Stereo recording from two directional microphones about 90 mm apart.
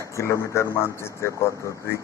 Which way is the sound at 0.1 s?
30° left (ahead or behind).